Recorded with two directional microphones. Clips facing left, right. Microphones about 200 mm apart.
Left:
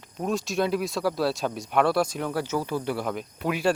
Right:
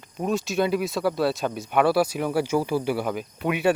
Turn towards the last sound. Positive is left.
turn(degrees=-5)  # may be behind; listen again after turning